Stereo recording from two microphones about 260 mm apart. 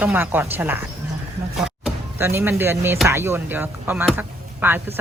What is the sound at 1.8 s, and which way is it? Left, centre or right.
Speech, centre.